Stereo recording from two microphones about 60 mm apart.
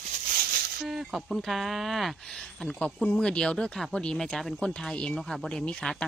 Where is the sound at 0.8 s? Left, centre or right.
Centre.